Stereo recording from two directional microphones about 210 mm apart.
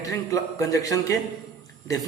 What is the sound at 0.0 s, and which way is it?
Speech, 15° left (ahead or behind).